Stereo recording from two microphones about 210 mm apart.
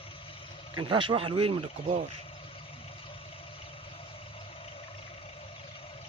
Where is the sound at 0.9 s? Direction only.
25° right (ahead or behind).